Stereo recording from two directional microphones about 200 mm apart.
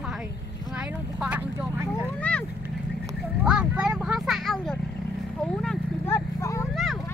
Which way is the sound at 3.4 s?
5° right (ahead or behind).